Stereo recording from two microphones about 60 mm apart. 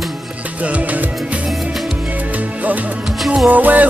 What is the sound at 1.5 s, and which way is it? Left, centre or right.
Music, centre.